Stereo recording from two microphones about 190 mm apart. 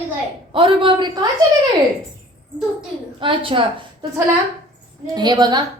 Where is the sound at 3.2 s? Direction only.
25° right (ahead or behind).